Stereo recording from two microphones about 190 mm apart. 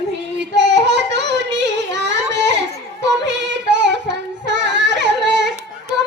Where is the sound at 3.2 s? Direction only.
65° right (ahead or behind).